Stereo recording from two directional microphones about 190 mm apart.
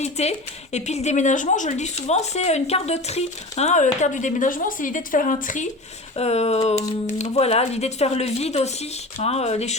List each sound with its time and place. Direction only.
0.0 s a woman's voice: 35° left (ahead or behind)